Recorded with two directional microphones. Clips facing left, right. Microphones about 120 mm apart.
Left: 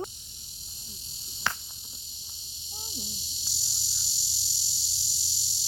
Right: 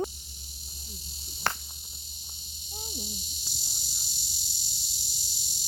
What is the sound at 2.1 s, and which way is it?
Cricket, 50° right (ahead or behind).